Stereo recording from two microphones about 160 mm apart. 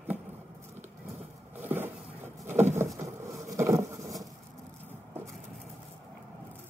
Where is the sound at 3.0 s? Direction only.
20° right (ahead or behind).